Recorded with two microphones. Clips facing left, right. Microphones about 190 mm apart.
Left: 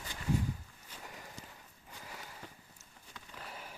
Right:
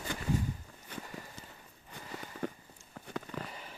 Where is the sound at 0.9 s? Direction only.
60° right (ahead or behind).